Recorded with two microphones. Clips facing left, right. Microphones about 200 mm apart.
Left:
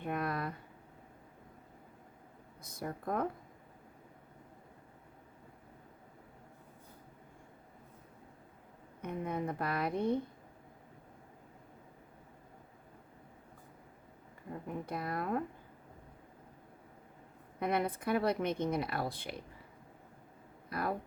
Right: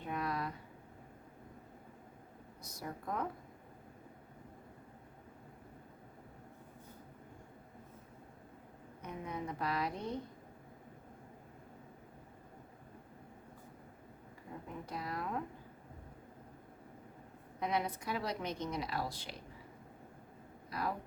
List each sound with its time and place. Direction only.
0.0 s a sound: 55° left (ahead or behind)
2.6 s speech: 55° left (ahead or behind)
9.0 s a sound: 55° left (ahead or behind)
14.8 s speech: 55° left (ahead or behind)
17.6 s speech: 55° left (ahead or behind)
20.7 s speech: 55° left (ahead or behind)